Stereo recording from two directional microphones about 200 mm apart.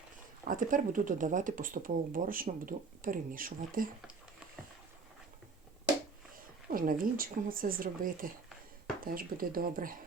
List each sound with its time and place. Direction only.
0.4 s speech: 40° right (ahead or behind)
6.7 s speech: 45° right (ahead or behind)